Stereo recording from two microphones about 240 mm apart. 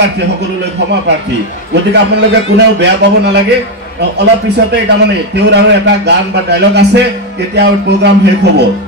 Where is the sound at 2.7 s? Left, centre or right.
Right.